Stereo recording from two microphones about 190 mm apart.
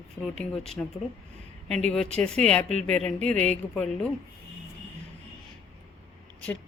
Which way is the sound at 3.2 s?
35° right (ahead or behind).